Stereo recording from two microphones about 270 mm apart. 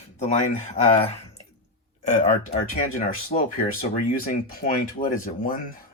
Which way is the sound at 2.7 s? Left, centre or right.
Left.